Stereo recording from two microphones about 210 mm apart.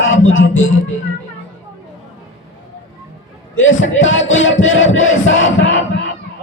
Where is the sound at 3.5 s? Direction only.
65° left (ahead or behind).